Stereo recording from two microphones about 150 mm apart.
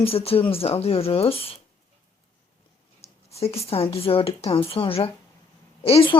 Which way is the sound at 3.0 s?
45° left (ahead or behind).